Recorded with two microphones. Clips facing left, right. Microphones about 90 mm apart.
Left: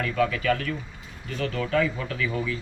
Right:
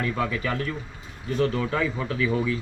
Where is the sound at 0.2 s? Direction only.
25° right (ahead or behind).